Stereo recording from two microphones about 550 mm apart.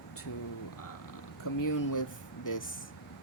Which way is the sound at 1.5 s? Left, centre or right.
Left.